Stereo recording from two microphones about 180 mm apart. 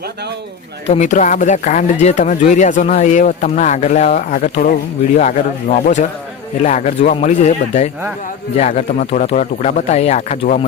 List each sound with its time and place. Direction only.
0.9 s speech: 40° left (ahead or behind)
5.8 s speech: 45° left (ahead or behind)